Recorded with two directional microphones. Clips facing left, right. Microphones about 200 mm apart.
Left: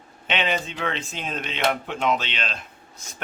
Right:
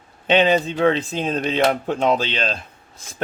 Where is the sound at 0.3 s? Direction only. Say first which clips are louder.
Right 9 dB; 35° right (ahead or behind).